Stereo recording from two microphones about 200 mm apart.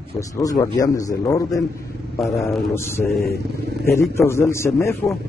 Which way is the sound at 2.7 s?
10° left (ahead or behind).